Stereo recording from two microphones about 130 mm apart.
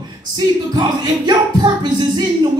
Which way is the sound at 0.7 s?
35° right (ahead or behind).